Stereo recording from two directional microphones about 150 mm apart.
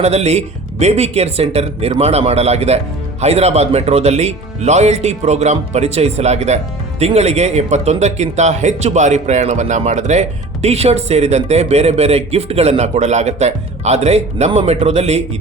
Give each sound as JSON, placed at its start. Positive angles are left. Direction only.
{"t": 0.0, "sound": "speech", "side_deg": -45}